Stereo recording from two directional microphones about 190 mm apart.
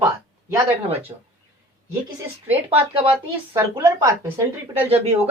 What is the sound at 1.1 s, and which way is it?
Speech, 25° right (ahead or behind).